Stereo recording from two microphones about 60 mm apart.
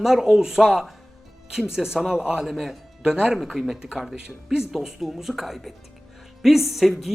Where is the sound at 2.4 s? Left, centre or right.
Centre.